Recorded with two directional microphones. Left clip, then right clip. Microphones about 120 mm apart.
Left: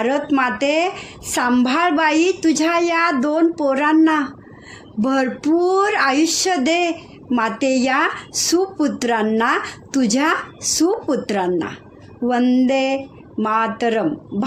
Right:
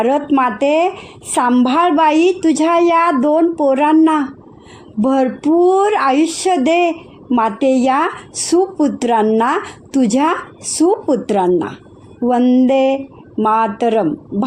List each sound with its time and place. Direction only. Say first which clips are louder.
0.0 s speech: right 4 dB; 45° right (ahead or behind)